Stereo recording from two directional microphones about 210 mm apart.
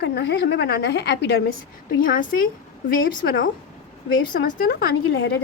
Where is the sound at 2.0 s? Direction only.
40° left (ahead or behind).